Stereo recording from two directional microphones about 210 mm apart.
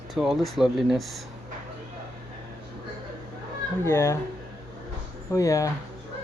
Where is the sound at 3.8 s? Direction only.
15° left (ahead or behind).